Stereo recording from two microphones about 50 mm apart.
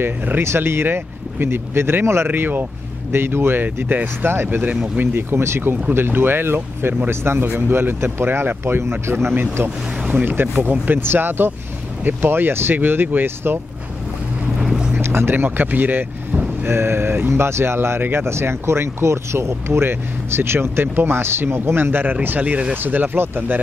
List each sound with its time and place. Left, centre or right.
0.0 s speech: right
2.2 s speech: right
3.1 s speech: right
5.9 s speech: right
7.4 s speech: right
12.3 s speech: right
14.6 s boat: centre
15.0 s speech: right
16.6 s speech: right
17.3 s speech: right
22.4 s speech: right
22.8 s speech: right